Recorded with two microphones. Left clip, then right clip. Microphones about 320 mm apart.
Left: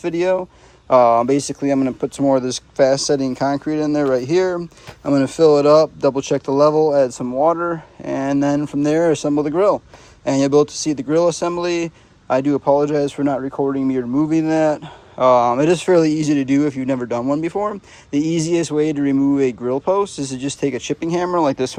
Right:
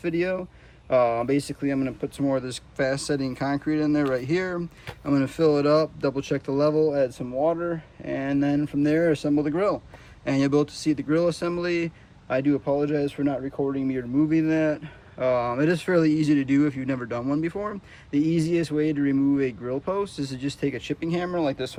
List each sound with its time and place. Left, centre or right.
0.0 s speech: centre